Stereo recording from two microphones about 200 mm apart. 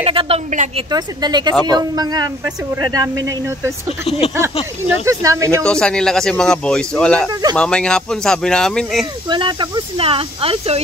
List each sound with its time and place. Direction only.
0.0 s speech: 30° right (ahead or behind)
0.5 s speech: 40° right (ahead or behind)
0.8 s speech: 20° right (ahead or behind)
5.0 s speech: 15° right (ahead or behind)
5.6 s speech: 5° left (ahead or behind)
9.3 s speech: 25° right (ahead or behind)